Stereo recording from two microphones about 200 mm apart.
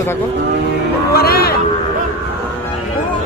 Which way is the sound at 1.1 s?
50° left (ahead or behind).